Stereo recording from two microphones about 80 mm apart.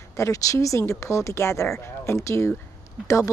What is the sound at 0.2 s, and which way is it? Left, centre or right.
Speech, left.